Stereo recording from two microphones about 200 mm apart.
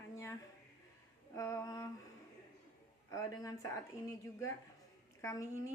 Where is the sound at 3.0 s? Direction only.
15° left (ahead or behind).